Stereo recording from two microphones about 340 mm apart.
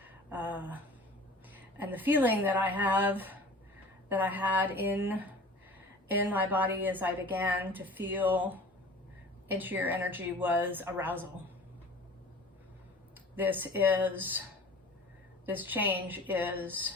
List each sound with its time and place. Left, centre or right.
0.0 s a sound: centre
1.5 s a woman's voice: centre
13.3 s a woman's voice: centre
15.4 s a woman's voice: centre